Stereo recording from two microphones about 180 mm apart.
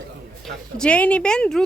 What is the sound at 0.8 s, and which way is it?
Speech, 5° left (ahead or behind).